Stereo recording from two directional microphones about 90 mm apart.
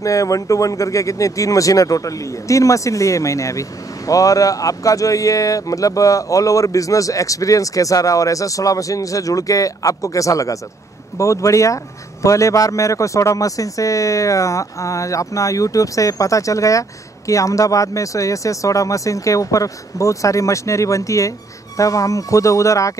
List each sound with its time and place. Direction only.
0.0 s speech: 35° left (ahead or behind)